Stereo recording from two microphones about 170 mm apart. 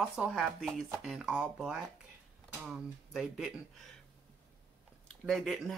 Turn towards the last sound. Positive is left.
turn(degrees=0)  # may be behind; listen again after turning